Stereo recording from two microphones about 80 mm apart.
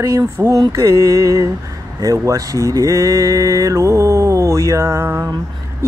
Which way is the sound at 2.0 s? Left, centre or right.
Right.